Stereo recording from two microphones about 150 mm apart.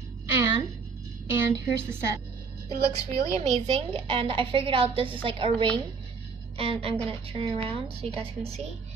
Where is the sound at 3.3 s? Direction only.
45° right (ahead or behind).